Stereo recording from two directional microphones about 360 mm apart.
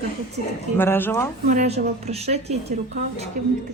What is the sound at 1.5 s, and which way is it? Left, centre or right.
A woman's voice, centre.